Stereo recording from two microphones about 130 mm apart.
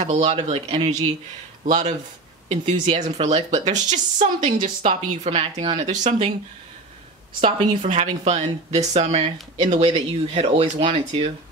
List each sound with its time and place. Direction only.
0.0 s speech: 60° right (ahead or behind)
0.4 s speech: 45° right (ahead or behind); by 2.0 s 65° right (ahead or behind)
3.0 s speech: 55° right (ahead or behind)
5.3 s speech: 50° right (ahead or behind)
7.4 s speech: 65° right (ahead or behind); by 11.2 s 45° right (ahead or behind)